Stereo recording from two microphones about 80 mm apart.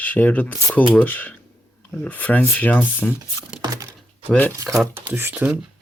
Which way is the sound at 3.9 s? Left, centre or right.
Centre.